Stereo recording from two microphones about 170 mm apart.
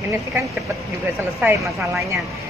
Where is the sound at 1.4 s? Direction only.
10° right (ahead or behind).